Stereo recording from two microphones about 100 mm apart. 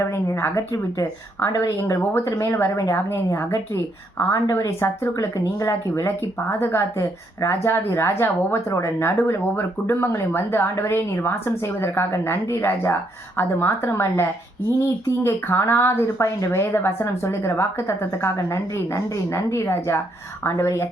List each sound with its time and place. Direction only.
0.3 s a woman's voice: 30° left (ahead or behind)
2.7 s speech: 35° left (ahead or behind)
5.9 s a woman's voice: 25° left (ahead or behind)